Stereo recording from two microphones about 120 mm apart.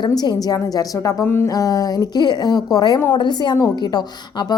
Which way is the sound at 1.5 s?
30° left (ahead or behind).